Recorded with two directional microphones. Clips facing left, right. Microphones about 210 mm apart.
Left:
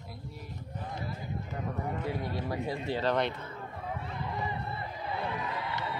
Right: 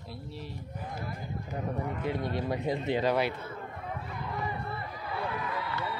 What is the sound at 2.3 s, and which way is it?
Speech, 25° right (ahead or behind).